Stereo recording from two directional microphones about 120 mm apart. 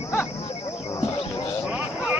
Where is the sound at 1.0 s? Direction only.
40° left (ahead or behind).